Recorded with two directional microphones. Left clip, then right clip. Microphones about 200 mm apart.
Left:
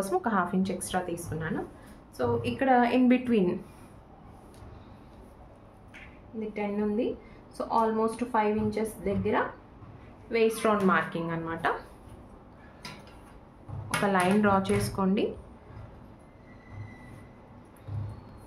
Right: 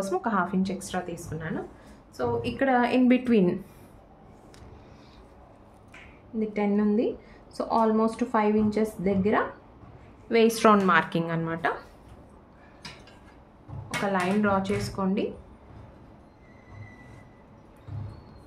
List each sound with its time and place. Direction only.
0.0 s a woman's voice: 10° right (ahead or behind)
2.1 s a woman's voice: 20° right (ahead or behind)
6.5 s a woman's voice: 45° right (ahead or behind)
10.3 s a woman's voice: 60° right (ahead or behind)
11.4 s a woman's voice: 25° right (ahead or behind)
13.8 s speech: 10° left (ahead or behind)